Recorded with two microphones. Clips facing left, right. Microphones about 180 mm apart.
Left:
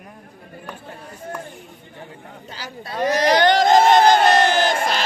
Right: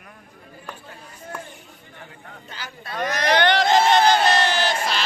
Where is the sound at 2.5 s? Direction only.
35° left (ahead or behind).